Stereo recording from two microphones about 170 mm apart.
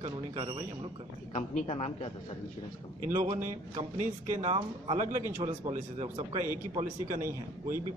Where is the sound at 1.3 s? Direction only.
35° left (ahead or behind).